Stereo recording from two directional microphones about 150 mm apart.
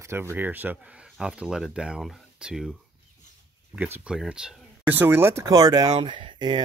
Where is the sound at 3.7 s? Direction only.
10° right (ahead or behind).